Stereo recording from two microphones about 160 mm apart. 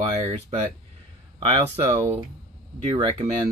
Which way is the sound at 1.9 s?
30° right (ahead or behind).